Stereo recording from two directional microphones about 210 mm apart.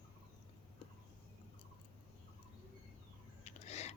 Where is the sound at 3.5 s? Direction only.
30° left (ahead or behind).